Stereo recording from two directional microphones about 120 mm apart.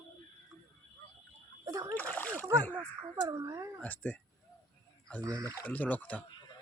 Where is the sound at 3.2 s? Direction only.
25° right (ahead or behind).